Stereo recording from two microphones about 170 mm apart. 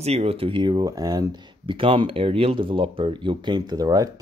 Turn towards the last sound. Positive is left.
turn(degrees=-20)  # may be behind; listen again after turning